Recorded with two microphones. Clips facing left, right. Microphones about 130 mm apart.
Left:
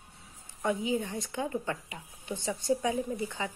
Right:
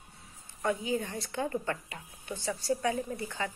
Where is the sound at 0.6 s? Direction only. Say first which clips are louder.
Left 1 dB; 15° left (ahead or behind).